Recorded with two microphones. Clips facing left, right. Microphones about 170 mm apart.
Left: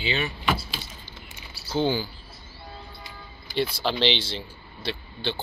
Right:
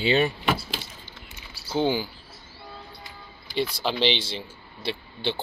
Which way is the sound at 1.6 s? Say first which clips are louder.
Even; 15° right (ahead or behind).